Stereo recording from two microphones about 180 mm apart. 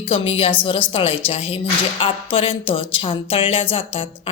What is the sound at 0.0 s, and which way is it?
A woman's voice, 35° left (ahead or behind).